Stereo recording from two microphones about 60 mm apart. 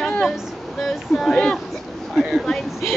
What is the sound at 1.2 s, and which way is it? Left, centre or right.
Speech, centre.